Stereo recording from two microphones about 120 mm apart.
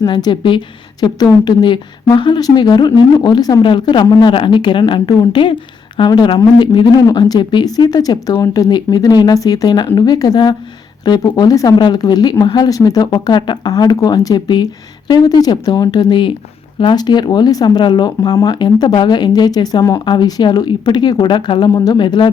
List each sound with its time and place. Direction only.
0.0 s speech: 35° left (ahead or behind)